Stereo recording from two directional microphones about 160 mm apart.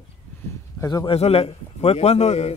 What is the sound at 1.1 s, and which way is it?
Speech, 40° left (ahead or behind).